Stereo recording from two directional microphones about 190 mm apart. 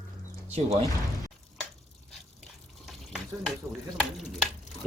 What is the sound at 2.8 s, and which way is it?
Frying, centre (ahead or behind).